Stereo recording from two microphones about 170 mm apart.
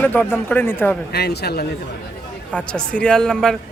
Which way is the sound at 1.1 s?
70° left (ahead or behind).